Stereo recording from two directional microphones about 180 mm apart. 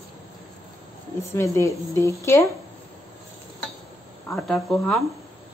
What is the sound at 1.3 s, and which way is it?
Speech, 15° left (ahead or behind).